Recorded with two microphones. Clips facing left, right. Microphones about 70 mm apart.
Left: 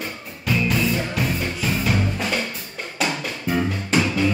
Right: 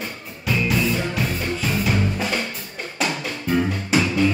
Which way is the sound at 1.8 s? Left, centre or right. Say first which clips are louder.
Right 1 dB; centre.